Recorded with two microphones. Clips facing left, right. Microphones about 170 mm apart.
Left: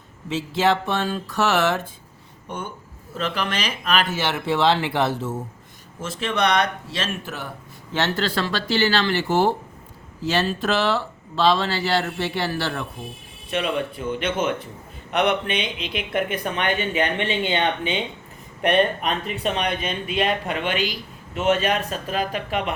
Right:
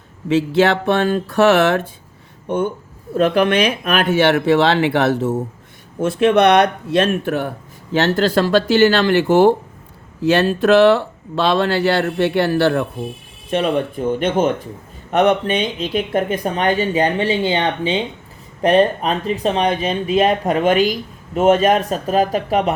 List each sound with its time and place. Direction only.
0.3 s speech: 65° right (ahead or behind)
8.0 s speech: 45° right (ahead or behind)
13.5 s speech: 45° right (ahead or behind)